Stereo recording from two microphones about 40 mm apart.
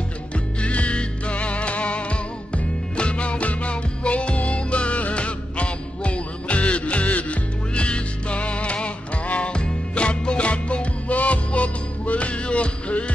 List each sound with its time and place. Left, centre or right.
0.6 s music: left